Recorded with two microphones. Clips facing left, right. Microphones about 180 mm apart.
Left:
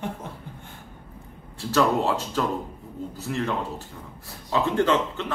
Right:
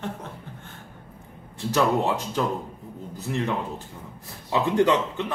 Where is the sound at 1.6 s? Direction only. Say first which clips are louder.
Even; 15° right (ahead or behind).